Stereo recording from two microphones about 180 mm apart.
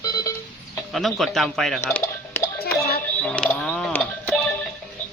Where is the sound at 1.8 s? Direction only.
15° left (ahead or behind).